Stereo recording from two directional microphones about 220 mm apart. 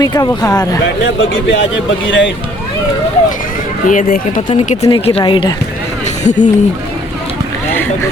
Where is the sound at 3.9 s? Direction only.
40° left (ahead or behind).